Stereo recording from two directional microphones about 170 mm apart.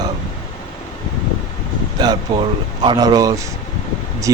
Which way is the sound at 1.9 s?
25° right (ahead or behind).